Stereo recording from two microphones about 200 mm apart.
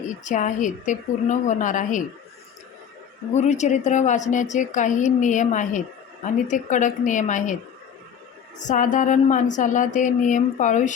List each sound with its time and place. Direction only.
0.3 s a woman's voice: 40° left (ahead or behind)
3.3 s a woman's voice: 35° left (ahead or behind)
8.5 s a woman's voice: 40° left (ahead or behind)